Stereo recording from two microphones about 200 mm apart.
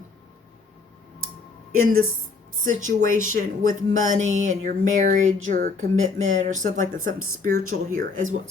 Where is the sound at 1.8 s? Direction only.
45° right (ahead or behind).